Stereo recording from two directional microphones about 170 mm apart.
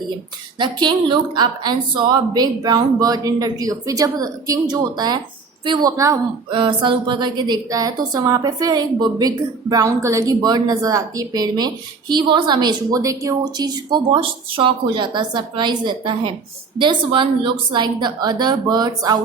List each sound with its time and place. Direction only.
0.6 s a woman's voice: 25° right (ahead or behind)